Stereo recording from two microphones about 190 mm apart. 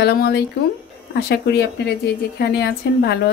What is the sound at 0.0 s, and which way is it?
A woman's voice, 60° left (ahead or behind).